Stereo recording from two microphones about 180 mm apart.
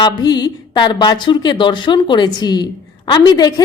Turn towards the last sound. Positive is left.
turn(degrees=25)  # may be behind; listen again after turning